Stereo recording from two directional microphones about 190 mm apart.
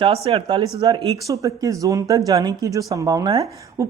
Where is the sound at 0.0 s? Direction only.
30° right (ahead or behind).